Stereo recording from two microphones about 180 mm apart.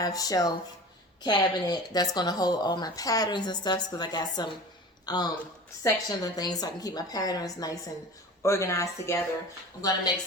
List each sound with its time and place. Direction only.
0.0 s a woman's voice: 20° left (ahead or behind)